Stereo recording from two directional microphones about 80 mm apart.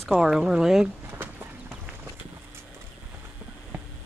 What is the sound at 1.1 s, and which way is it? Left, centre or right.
Horse, right.